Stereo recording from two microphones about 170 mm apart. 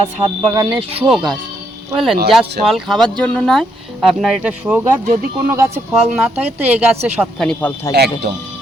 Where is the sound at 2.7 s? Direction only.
Centre (ahead or behind).